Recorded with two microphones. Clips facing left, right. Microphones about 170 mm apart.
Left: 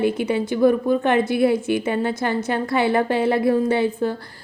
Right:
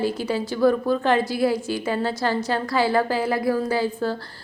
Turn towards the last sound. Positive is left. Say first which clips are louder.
# left 3 dB
turn(degrees=25)  # may be behind; listen again after turning